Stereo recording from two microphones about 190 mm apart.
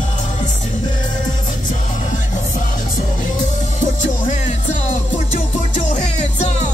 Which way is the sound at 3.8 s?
40° left (ahead or behind).